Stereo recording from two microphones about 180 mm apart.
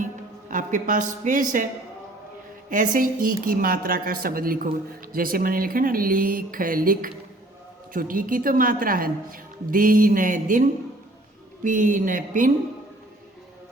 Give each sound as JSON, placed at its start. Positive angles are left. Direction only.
{"t": 0.0, "sound": "speech", "side_deg": -45}
{"t": 2.6, "sound": "a woman's voice", "side_deg": -45}
{"t": 11.6, "sound": "a woman's voice", "side_deg": -50}